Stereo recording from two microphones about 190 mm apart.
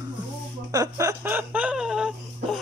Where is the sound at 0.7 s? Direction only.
15° right (ahead or behind); by 2.6 s centre (ahead or behind).